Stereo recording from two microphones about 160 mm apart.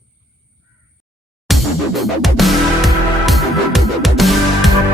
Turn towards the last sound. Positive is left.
turn(degrees=0)  # may be behind; listen again after turning